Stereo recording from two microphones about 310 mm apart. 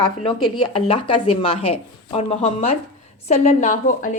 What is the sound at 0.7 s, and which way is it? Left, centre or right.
A woman's voice, centre.